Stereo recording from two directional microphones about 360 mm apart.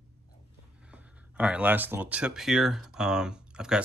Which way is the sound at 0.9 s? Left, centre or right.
Centre.